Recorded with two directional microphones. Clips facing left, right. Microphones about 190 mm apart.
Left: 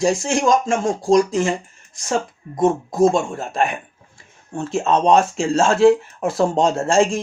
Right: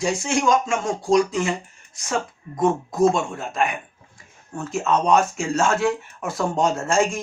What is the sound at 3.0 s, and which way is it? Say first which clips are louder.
Speech: left 3 dB; 35° left (ahead or behind).